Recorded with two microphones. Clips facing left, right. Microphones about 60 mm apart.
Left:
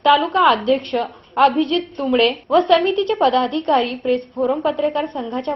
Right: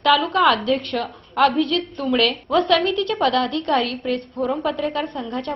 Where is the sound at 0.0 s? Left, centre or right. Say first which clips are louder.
Left 3 dB; centre.